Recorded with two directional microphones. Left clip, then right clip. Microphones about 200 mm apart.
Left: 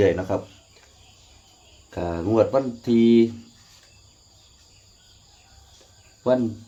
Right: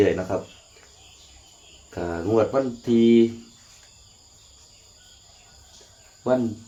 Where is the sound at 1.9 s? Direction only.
50° left (ahead or behind).